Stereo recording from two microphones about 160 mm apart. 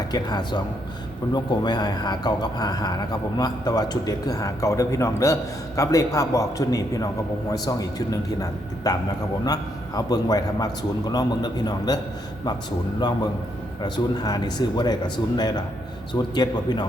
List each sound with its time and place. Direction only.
0.1 s speech: 25° left (ahead or behind)
13.8 s speech: 25° left (ahead or behind)